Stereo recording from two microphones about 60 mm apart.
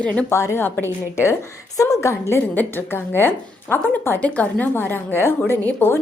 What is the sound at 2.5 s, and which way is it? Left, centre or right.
A woman's voice, left.